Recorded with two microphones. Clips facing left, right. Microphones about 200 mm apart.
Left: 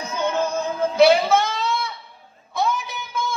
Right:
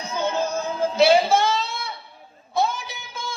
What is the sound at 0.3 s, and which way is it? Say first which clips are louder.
Music: left 3 dB; 60° left (ahead or behind).